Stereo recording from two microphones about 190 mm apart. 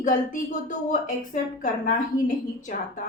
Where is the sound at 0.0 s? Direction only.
45° left (ahead or behind).